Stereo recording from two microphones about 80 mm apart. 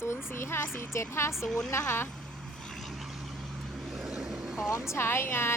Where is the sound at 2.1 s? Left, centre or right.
Centre.